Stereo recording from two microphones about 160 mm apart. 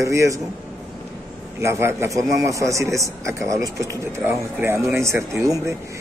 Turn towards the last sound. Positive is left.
turn(degrees=-20)  # may be behind; listen again after turning